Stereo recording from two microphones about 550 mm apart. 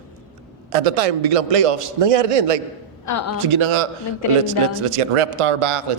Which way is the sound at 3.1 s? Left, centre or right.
Left.